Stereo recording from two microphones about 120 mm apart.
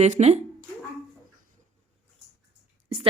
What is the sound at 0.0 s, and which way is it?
Speech, 65° right (ahead or behind).